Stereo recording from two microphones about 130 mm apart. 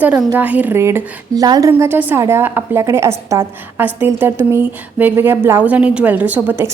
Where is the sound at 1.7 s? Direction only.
15° right (ahead or behind).